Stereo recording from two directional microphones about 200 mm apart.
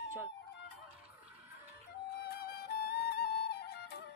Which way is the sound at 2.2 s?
50° left (ahead or behind).